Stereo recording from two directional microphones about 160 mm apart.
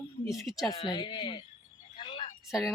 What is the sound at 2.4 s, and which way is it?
Speech, 5° right (ahead or behind).